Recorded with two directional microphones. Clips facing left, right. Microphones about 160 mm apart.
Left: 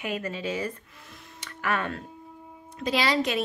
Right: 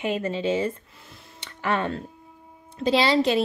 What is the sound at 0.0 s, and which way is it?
A woman's voice, 25° right (ahead or behind).